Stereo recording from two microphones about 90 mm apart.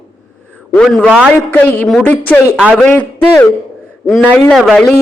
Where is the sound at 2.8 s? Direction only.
15° left (ahead or behind).